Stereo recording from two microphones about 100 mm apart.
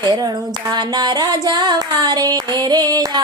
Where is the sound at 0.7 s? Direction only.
45° right (ahead or behind).